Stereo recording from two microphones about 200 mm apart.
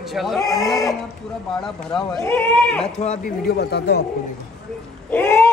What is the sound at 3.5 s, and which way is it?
Speech, 55° left (ahead or behind).